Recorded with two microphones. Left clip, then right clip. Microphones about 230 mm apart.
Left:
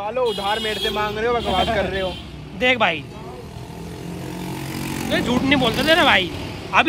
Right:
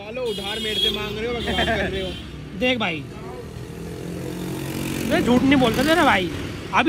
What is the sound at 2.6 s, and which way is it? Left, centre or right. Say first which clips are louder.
Speech: left 5 dB; centre.